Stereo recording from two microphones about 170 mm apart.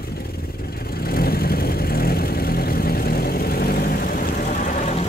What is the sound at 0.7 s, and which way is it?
Vehicle, 65° left (ahead or behind).